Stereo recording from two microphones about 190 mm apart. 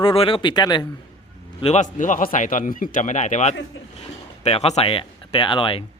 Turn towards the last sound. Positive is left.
turn(degrees=25)  # may be behind; listen again after turning